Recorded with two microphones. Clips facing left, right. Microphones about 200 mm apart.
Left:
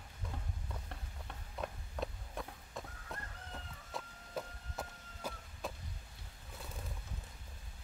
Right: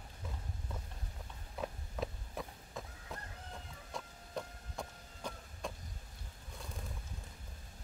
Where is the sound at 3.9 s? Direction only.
Centre (ahead or behind).